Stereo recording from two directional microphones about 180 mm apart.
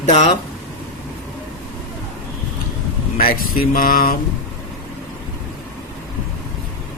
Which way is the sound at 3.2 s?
50° left (ahead or behind).